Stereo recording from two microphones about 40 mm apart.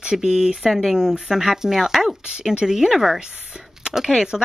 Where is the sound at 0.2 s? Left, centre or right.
Centre.